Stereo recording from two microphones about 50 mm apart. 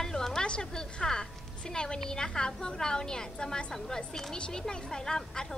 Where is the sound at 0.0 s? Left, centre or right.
Centre.